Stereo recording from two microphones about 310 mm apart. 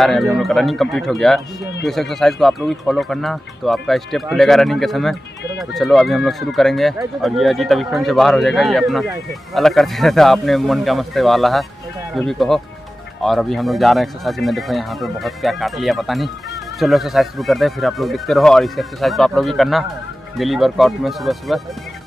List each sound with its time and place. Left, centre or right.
0.0 s speech: centre